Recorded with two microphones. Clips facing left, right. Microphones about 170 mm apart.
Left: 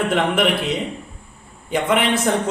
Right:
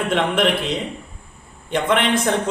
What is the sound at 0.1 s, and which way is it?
A man's voice, centre (ahead or behind).